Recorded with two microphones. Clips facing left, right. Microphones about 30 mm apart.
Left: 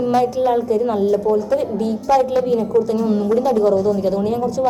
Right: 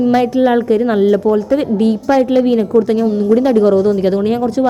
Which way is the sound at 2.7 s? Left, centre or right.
Right.